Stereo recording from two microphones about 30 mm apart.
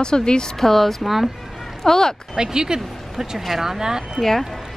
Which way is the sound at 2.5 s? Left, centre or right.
Right.